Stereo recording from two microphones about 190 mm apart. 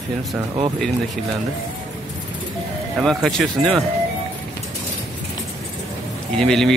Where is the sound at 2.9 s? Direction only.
Centre (ahead or behind).